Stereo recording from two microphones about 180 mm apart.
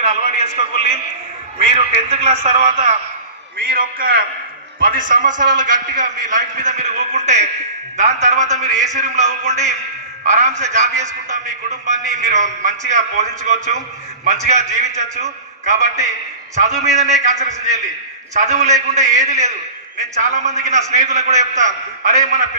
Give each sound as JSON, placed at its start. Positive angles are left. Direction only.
{"t": 0.1, "sound": "a man's voice", "side_deg": -40}
{"t": 3.6, "sound": "a man's voice", "side_deg": -55}
{"t": 14.9, "sound": "a man's voice", "side_deg": -40}